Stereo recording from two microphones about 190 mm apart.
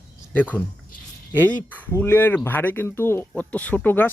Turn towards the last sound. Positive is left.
turn(degrees=10)  # may be behind; listen again after turning